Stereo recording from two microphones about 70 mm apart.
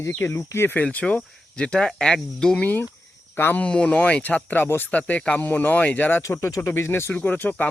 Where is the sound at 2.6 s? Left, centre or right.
Left.